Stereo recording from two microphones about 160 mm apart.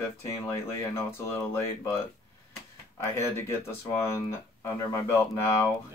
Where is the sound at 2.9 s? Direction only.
15° left (ahead or behind).